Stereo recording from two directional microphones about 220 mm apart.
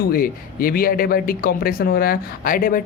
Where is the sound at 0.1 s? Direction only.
40° left (ahead or behind).